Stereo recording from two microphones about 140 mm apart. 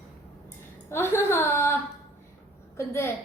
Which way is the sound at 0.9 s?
15° left (ahead or behind).